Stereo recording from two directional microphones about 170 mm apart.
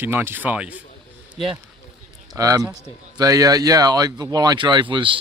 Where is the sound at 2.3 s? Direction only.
20° right (ahead or behind).